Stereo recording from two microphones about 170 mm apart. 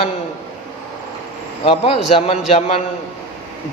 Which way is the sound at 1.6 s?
35° left (ahead or behind).